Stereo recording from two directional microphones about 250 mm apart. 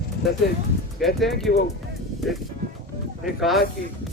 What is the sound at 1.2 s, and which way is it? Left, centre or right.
Speech, centre.